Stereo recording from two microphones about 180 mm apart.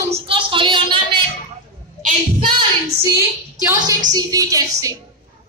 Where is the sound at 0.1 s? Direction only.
30° right (ahead or behind).